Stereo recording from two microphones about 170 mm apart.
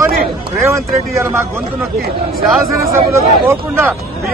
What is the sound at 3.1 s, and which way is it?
Speech, 15° right (ahead or behind).